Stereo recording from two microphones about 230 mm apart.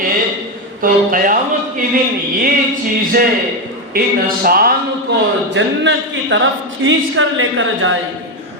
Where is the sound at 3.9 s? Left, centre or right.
Right.